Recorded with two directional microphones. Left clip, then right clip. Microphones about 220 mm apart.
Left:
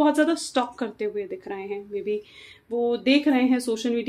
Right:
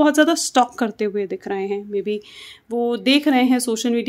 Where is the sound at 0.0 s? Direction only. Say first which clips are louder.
Right 5 dB; 50° right (ahead or behind).